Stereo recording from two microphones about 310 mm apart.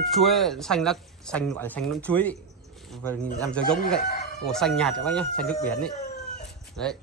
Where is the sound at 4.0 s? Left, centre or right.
Left.